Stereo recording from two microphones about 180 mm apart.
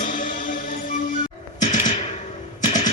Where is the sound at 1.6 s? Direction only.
40° left (ahead or behind).